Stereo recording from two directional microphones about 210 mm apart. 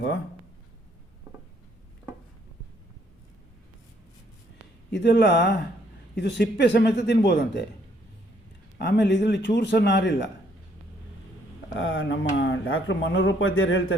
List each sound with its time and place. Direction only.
4.9 s speech: 55° left (ahead or behind)
8.8 s speech: 55° left (ahead or behind)
11.8 s speech: 65° left (ahead or behind)